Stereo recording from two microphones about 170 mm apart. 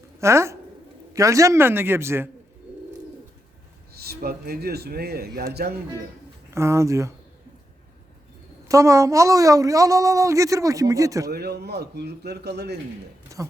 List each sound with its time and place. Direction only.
0.2 s a man's voice: 15° right (ahead or behind)
4.0 s speech: 65° right (ahead or behind)
6.5 s a man's voice: 15° right (ahead or behind)
8.6 s speech: 20° right (ahead or behind)
11.3 s speech: 70° right (ahead or behind)
13.3 s speech: 20° right (ahead or behind)